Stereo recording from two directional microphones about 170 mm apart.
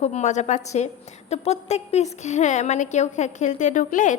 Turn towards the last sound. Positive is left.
turn(degrees=50)  # may be behind; listen again after turning